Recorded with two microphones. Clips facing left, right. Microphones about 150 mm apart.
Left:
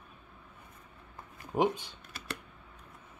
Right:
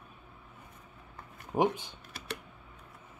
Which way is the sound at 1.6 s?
20° right (ahead or behind).